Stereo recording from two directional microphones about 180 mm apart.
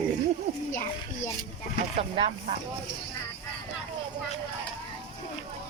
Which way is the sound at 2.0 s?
35° right (ahead or behind).